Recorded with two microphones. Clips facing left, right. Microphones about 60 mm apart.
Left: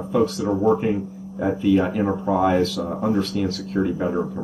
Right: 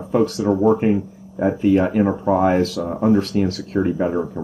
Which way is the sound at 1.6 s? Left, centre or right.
Right.